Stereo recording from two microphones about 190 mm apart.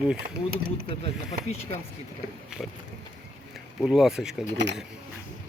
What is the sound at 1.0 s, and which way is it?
Speech, 35° left (ahead or behind).